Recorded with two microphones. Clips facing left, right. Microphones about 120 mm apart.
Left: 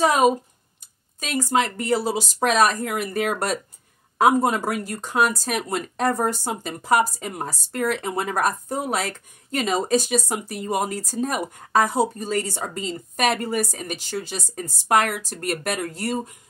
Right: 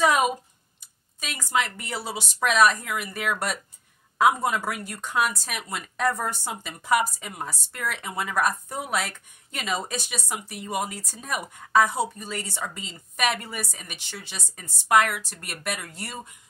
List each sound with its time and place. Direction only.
0.0 s speech: 35° left (ahead or behind)